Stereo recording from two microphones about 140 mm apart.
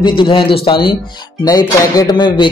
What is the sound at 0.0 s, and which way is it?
Speech, 35° left (ahead or behind).